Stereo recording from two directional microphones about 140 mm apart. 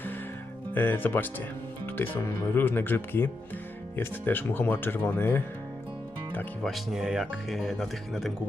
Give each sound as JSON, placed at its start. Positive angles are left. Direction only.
{"t": 0.7, "sound": "speech", "side_deg": 15}
{"t": 6.6, "sound": "speech", "side_deg": 0}